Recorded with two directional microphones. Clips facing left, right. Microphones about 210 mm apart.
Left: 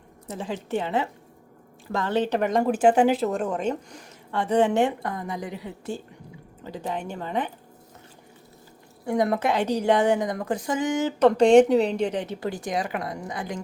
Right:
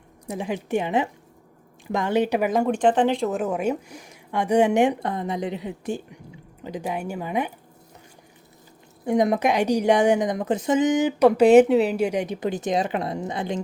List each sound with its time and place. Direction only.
0.3 s a woman's voice: 15° right (ahead or behind)
9.0 s a woman's voice: 20° right (ahead or behind)